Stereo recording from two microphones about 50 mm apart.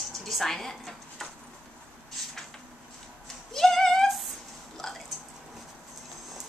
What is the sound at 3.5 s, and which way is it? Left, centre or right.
Female singing, centre.